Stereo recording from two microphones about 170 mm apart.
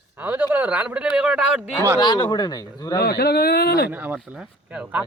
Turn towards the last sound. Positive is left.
turn(degrees=-5)  # may be behind; listen again after turning